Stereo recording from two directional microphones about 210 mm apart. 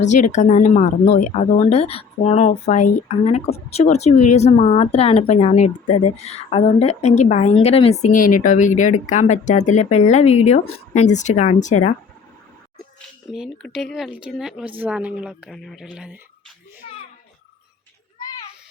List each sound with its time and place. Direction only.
0.0 s speech: 35° left (ahead or behind)
13.3 s speech: centre (ahead or behind)
16.8 s a sound: 30° left (ahead or behind)